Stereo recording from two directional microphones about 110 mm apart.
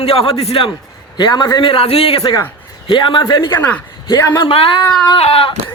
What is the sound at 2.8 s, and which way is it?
Speech, 45° left (ahead or behind).